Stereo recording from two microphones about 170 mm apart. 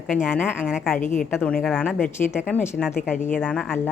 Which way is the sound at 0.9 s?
45° left (ahead or behind).